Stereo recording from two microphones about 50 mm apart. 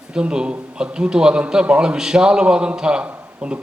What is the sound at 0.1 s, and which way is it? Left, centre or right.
A man's voice, centre.